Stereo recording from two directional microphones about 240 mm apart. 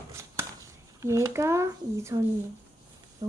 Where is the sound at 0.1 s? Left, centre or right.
Centre.